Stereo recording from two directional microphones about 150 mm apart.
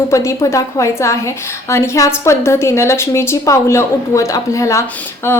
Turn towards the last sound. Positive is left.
turn(degrees=10)  # may be behind; listen again after turning